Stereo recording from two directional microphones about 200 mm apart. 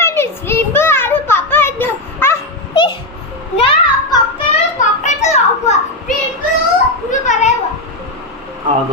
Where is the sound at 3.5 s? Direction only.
30° left (ahead or behind).